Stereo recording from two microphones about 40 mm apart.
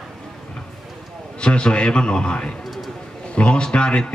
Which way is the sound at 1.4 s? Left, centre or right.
Left.